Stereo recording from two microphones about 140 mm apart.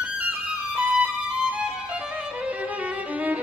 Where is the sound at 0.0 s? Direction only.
10° right (ahead or behind).